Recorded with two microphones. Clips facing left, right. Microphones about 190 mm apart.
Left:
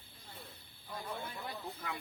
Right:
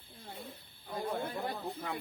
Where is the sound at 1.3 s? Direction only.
55° right (ahead or behind).